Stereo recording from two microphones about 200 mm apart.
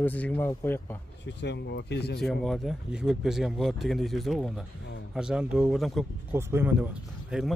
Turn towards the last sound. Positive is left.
turn(degrees=-5)  # may be behind; listen again after turning